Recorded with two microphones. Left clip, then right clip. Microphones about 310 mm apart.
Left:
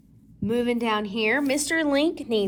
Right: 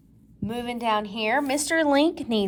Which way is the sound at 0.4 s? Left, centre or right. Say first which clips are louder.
Left 2 dB; centre.